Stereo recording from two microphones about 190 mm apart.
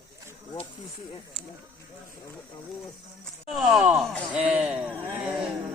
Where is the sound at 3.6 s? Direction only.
5° right (ahead or behind).